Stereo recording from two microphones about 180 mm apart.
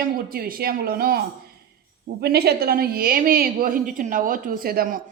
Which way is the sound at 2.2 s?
65° right (ahead or behind).